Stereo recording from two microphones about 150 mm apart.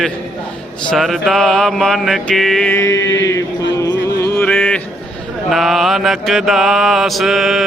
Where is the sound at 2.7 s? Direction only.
20° left (ahead or behind).